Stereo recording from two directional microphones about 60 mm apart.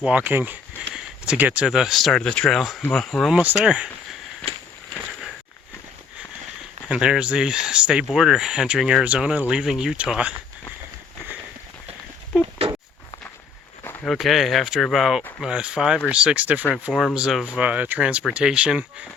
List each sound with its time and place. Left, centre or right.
0.0 s speech: right
0.9 s a sound: centre
1.4 s speech: right
1.6 s speech: centre
3.6 s speech: centre
6.8 s speech: centre
12.3 s a sound: centre
14.0 s speech: centre; by 16.6 s right
16.7 s speech: centre
17.5 s speech: right